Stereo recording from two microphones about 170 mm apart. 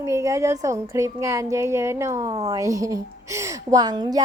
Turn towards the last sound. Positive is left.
turn(degrees=-25)  # may be behind; listen again after turning